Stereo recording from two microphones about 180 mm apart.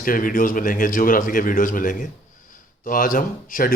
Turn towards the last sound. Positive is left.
turn(degrees=50)  # may be behind; listen again after turning